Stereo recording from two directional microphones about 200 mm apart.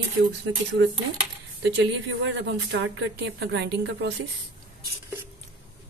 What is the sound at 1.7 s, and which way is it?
Speech, 65° right (ahead or behind).